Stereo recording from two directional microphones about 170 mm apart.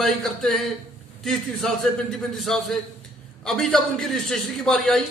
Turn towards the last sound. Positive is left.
turn(degrees=5)  # may be behind; listen again after turning